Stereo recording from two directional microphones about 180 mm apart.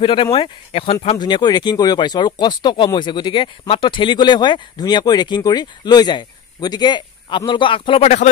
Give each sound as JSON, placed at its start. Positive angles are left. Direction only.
{"t": 0.0, "sound": "speech", "side_deg": 25}